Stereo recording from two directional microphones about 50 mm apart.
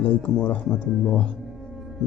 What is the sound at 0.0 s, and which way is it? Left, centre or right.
Speech, left.